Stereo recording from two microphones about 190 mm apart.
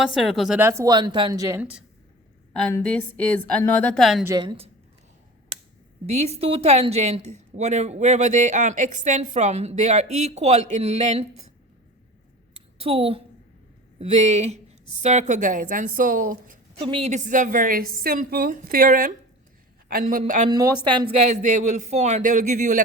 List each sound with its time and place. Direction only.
0.0 s a woman's voice: centre (ahead or behind); by 1.6 s 15° right (ahead or behind)
2.7 s a woman's voice: 10° left (ahead or behind)
4.3 s speech: 25° right (ahead or behind)
6.1 s a woman's voice: 35° right (ahead or behind)
12.5 s a sound: 30° right (ahead or behind)
14.0 s a woman's voice: 35° right (ahead or behind)
16.8 s a woman's voice: 30° right (ahead or behind)
20.5 s speech: 20° right (ahead or behind)
21.4 s a woman's voice: 40° right (ahead or behind)